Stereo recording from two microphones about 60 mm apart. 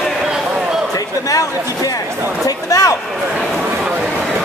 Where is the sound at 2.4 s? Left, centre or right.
Left.